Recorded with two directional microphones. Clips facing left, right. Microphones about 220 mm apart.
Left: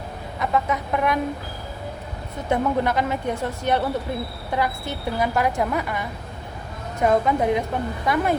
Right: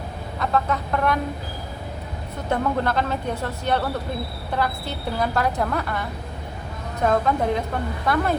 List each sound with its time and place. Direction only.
0.3 s brass instrument: 15° left (ahead or behind)
2.5 s a woman's voice: 15° left (ahead or behind)